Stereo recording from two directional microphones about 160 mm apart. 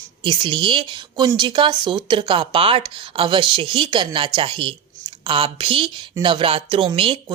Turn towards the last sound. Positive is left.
turn(degrees=-35)  # may be behind; listen again after turning